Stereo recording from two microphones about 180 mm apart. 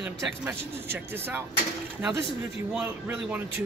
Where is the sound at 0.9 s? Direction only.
10° right (ahead or behind).